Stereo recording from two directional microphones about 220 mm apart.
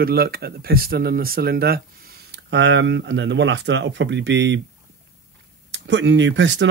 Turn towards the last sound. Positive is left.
turn(degrees=-55)  # may be behind; listen again after turning